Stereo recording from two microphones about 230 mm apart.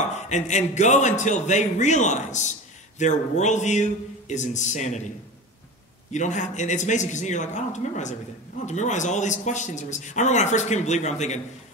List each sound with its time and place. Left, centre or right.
0.1 s a man's voice: left
6.1 s a man's voice: left